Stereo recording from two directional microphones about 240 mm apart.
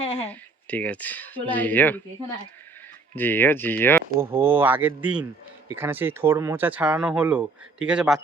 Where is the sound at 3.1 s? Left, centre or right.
Centre.